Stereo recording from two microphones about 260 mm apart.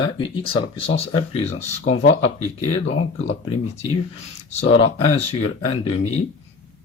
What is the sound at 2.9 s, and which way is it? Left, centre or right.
Speech, left.